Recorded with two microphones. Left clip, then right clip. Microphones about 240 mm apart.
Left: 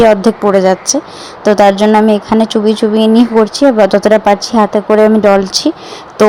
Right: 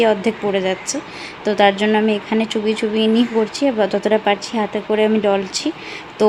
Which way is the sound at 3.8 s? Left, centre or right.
Centre.